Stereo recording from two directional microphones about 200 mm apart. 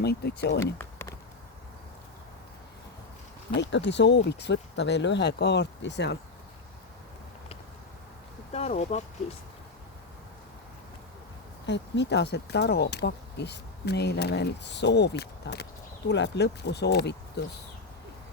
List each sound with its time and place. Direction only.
0.0 s speech: 55° left (ahead or behind)
0.6 s a sound: 15° left (ahead or behind)
3.6 s speech: 60° left (ahead or behind)
8.5 s speech: 35° left (ahead or behind)
11.6 s speech: 60° left (ahead or behind)